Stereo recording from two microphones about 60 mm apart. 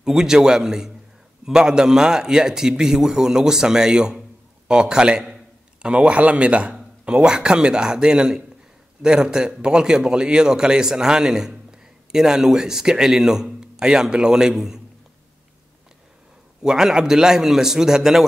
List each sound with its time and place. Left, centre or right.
0.0 s a man's voice: centre
16.6 s a man's voice: centre